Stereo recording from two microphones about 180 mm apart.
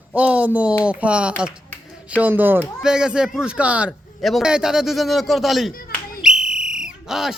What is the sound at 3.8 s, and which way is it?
Speech, centre (ahead or behind).